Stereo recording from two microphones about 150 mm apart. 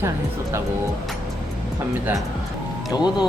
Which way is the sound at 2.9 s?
30° left (ahead or behind).